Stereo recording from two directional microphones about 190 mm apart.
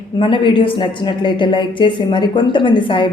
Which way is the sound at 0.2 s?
25° left (ahead or behind).